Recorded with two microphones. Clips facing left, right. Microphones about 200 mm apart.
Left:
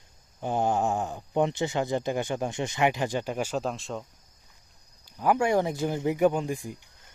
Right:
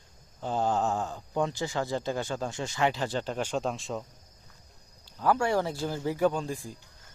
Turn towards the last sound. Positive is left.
turn(degrees=20)  # may be behind; listen again after turning